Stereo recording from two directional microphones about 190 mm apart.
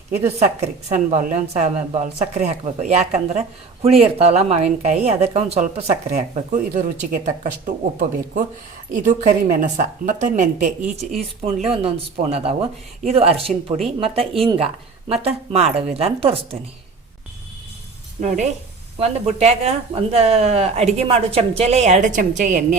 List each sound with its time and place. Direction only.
0.3 s a woman's voice: 35° right (ahead or behind)
13.0 s a woman's voice: 30° right (ahead or behind)
18.2 s a woman's voice: 40° right (ahead or behind)